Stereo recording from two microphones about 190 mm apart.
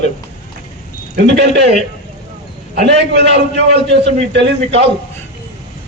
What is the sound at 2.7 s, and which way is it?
Speech, 65° right (ahead or behind).